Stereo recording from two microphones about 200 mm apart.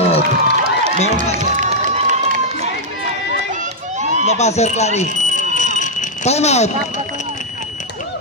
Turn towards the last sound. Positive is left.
turn(degrees=35)  # may be behind; listen again after turning